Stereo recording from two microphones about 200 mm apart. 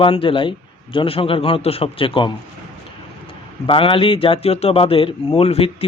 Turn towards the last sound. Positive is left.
turn(degrees=30)  # may be behind; listen again after turning